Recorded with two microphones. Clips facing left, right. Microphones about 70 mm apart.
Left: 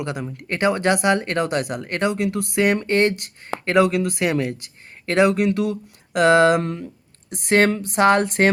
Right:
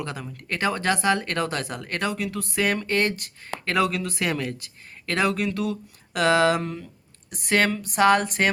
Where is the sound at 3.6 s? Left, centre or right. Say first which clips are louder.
Left 6 dB; left.